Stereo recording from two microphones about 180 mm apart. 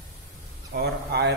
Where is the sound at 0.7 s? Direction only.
65° right (ahead or behind).